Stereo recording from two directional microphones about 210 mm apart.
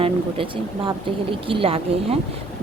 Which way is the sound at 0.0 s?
25° right (ahead or behind).